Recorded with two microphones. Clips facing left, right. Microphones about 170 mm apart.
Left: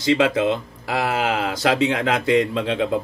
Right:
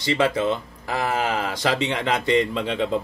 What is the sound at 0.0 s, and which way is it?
Speech, 90° left.